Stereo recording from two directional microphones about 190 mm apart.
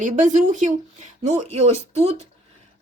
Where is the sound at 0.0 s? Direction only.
40° right (ahead or behind).